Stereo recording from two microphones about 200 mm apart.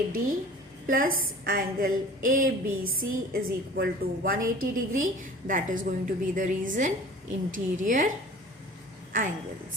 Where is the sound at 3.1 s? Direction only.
50° right (ahead or behind).